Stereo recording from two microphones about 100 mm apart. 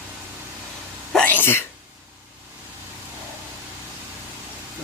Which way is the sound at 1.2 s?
20° left (ahead or behind).